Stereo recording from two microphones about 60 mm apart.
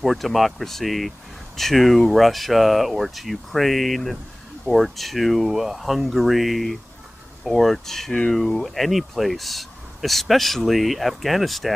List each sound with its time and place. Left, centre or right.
0.0 s speech: centre
8.1 s speech: centre